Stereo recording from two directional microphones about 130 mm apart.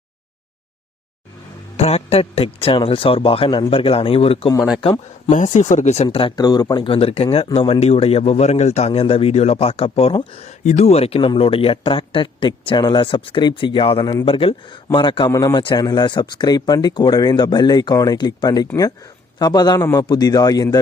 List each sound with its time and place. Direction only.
1.7 s speech: 55° left (ahead or behind)
5.3 s speech: 70° left (ahead or behind); by 6.3 s 45° left (ahead or behind)
6.3 s speech: 30° left (ahead or behind)
6.8 s speech: 45° left (ahead or behind)
10.6 s speech: 60° left (ahead or behind); by 15.3 s 35° left (ahead or behind)
15.3 s speech: 25° left (ahead or behind)